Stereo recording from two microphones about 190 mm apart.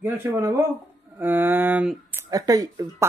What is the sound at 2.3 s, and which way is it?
Speech, 20° right (ahead or behind).